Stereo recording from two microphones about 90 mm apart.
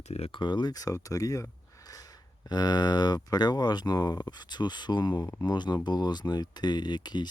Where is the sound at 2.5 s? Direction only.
50° left (ahead or behind).